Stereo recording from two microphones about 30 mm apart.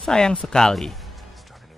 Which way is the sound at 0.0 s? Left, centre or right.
Left.